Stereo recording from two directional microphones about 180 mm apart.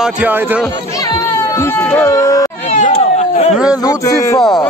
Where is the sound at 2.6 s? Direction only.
40° left (ahead or behind).